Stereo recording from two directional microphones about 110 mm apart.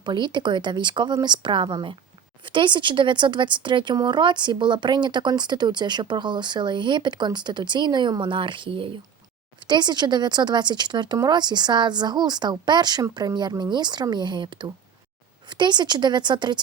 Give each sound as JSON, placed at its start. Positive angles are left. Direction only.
{"t": 0.0, "sound": "speech", "side_deg": -45}